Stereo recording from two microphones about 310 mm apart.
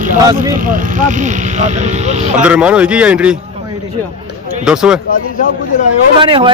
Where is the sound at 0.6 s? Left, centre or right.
Right.